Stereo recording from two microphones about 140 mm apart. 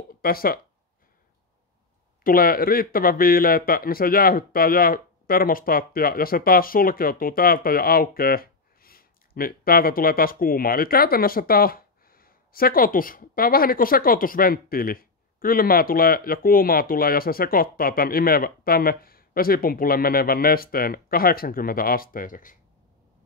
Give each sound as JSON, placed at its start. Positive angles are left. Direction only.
{"t": 0.2, "sound": "speech", "side_deg": 90}
{"t": 2.2, "sound": "speech", "side_deg": 90}